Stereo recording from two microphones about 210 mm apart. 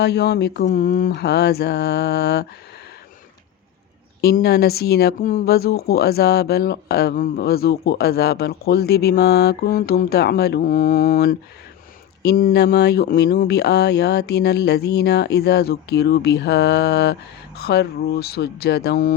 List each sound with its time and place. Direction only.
0.0 s speech: 55° left (ahead or behind)
4.2 s speech: 50° left (ahead or behind)